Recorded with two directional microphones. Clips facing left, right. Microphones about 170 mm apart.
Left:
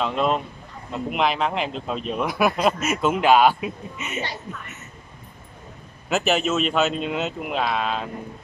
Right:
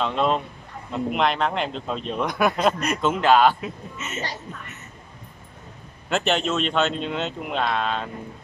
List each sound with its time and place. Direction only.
0.0 s speech: 5° left (ahead or behind)
4.2 s speech: 40° right (ahead or behind)
6.0 s speech: 5° left (ahead or behind)